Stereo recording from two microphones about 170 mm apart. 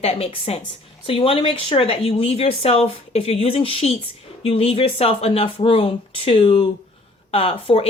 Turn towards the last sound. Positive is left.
turn(degrees=35)  # may be behind; listen again after turning